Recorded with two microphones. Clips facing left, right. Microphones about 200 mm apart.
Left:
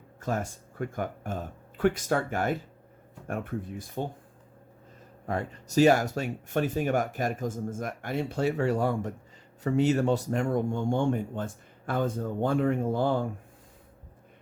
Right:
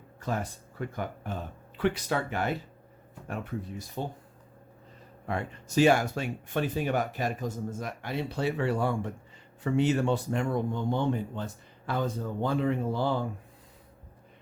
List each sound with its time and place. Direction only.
0.2 s speech: 45° left (ahead or behind)
5.2 s speech: 40° left (ahead or behind)